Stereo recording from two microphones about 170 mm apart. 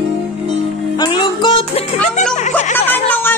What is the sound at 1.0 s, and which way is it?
Music, 25° left (ahead or behind).